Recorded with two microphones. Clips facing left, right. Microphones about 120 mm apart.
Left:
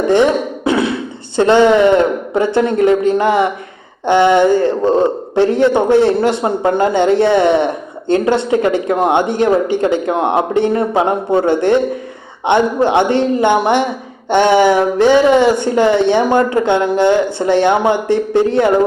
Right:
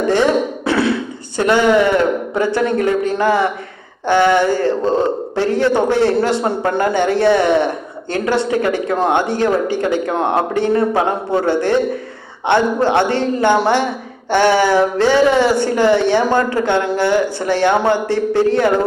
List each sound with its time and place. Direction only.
0.1 s beatboxing: 20° left (ahead or behind)
1.4 s a man's voice: 25° left (ahead or behind)